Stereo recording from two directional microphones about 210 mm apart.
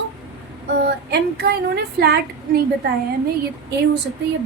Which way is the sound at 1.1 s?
50° right (ahead or behind).